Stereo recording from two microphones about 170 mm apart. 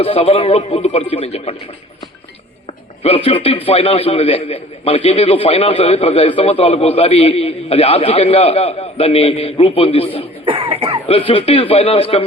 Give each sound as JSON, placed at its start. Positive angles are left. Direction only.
{"t": 0.0, "sound": "a man's voice", "side_deg": 35}
{"t": 3.2, "sound": "a man's voice", "side_deg": 35}
{"t": 10.4, "sound": "cough", "side_deg": -30}
{"t": 11.3, "sound": "a man's voice", "side_deg": 35}